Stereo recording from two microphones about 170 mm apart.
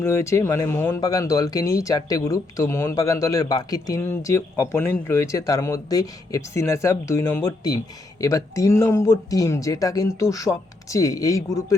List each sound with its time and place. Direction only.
0.0 s speech: 15° left (ahead or behind)